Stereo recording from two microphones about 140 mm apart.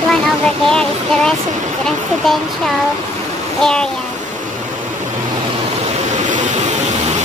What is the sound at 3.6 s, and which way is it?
Child singing, 5° left (ahead or behind).